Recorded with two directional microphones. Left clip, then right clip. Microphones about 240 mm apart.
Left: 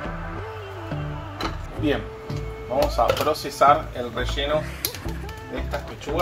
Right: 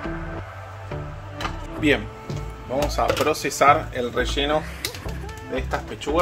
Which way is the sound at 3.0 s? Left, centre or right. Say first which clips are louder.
Even; right.